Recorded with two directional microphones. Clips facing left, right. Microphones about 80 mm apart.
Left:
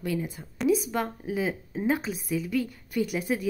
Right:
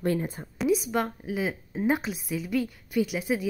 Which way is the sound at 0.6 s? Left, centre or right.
Centre.